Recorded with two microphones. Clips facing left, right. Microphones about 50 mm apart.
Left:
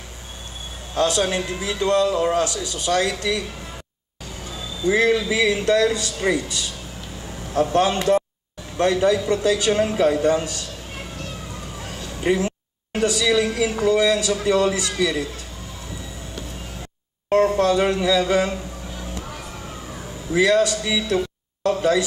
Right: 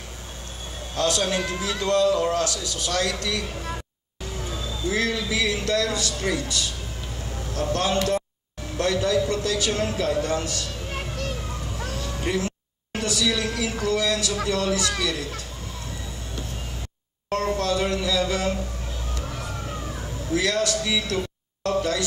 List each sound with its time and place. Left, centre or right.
0.9 s a man's voice: left
4.8 s a man's voice: left
12.3 s music: left
13.2 s a man's voice: left
17.3 s a man's voice: left
20.3 s a man's voice: left